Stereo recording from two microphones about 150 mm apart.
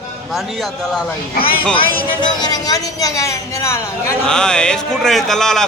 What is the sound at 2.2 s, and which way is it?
Speech, 25° left (ahead or behind).